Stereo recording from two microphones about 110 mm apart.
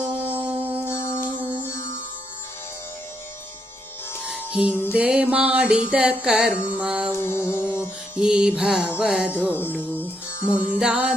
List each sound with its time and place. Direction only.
0.2 s music: 15° right (ahead or behind)
0.9 s music: 25° left (ahead or behind)
4.2 s music: 10° right (ahead or behind)
4.7 s music: 20° left (ahead or behind)
4.9 s music: 10° right (ahead or behind)
7.1 s music: 25° left (ahead or behind)
8.3 s music: 5° right (ahead or behind)
9.6 s music: 20° left (ahead or behind)
10.5 s music: 10° right (ahead or behind)